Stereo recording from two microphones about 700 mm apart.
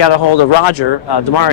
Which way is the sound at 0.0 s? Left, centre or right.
Left.